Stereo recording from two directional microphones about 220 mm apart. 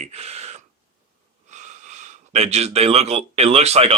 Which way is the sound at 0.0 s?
30° right (ahead or behind).